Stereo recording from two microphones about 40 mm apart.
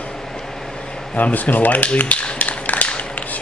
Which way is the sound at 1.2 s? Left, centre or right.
Left.